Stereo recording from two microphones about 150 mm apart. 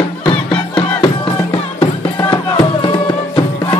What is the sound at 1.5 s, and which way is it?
Music, 35° left (ahead or behind).